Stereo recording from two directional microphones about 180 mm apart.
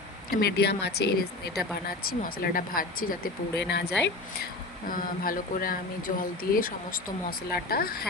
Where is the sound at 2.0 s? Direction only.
55° left (ahead or behind); by 3.9 s 70° left (ahead or behind).